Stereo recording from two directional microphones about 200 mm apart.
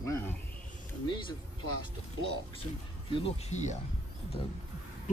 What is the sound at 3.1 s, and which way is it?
Speech, 30° left (ahead or behind).